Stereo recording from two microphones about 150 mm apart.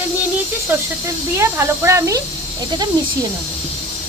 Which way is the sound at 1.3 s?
20° right (ahead or behind).